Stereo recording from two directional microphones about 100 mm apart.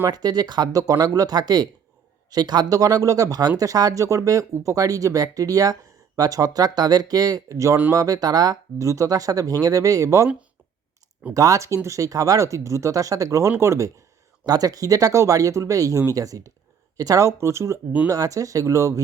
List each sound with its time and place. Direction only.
0.1 s speech: 40° right (ahead or behind)
11.3 s speech: 35° right (ahead or behind)
14.4 s speech: 40° right (ahead or behind)